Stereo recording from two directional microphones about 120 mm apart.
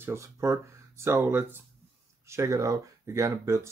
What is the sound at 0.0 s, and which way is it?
Speech, 25° right (ahead or behind).